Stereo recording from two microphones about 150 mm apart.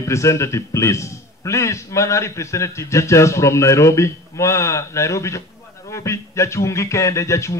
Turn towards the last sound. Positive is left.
turn(degrees=20)  # may be behind; listen again after turning